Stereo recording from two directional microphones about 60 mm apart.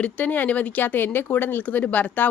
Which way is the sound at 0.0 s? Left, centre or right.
Left.